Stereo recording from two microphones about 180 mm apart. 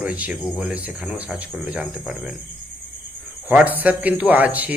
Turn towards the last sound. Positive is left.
turn(degrees=-10)  # may be behind; listen again after turning